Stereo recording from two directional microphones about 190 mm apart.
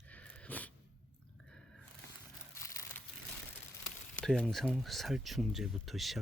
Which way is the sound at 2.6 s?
15° left (ahead or behind).